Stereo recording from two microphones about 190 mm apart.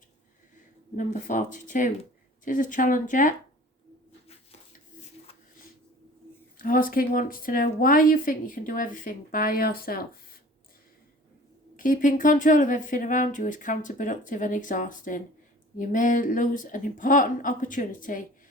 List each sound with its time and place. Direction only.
0.9 s speech: 40° left (ahead or behind)
6.6 s speech: 45° left (ahead or behind)
11.8 s speech: 45° left (ahead or behind)